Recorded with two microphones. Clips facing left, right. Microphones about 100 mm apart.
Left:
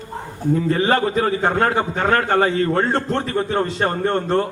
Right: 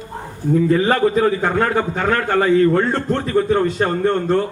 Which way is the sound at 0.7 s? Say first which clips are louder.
Right 2 dB; 40° left (ahead or behind).